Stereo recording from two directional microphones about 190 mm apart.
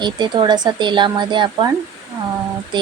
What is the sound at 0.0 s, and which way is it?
Speech, 25° right (ahead or behind).